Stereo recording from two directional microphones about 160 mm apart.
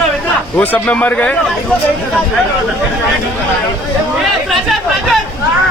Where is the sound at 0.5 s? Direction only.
10° left (ahead or behind).